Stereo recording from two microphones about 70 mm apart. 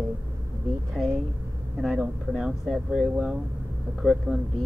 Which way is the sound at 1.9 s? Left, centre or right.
Centre.